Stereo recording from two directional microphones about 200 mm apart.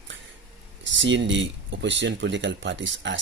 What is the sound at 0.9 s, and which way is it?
Speech, 65° right (ahead or behind).